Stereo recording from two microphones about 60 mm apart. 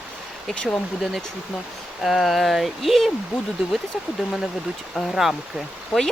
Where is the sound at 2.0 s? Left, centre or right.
Centre.